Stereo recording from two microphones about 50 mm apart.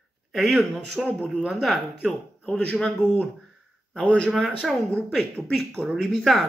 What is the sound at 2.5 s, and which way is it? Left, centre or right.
Speech, left.